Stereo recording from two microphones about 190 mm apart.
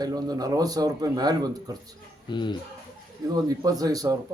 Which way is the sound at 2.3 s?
25° left (ahead or behind).